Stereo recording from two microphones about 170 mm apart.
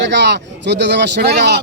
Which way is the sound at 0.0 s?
90° right.